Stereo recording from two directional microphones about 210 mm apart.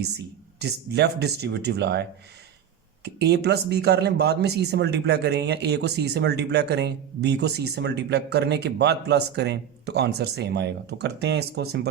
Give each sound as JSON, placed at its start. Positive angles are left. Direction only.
{"t": 0.6, "sound": "speech", "side_deg": -50}